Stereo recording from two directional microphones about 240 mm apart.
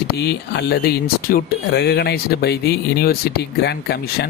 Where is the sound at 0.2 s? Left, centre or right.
Left.